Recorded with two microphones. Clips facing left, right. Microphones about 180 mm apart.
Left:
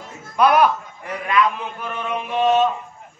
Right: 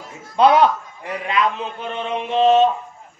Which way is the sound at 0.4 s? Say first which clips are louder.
Right 2 dB; 25° right (ahead or behind).